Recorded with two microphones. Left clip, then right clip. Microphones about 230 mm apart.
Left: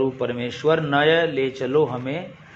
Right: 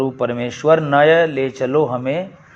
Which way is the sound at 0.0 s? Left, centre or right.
Right.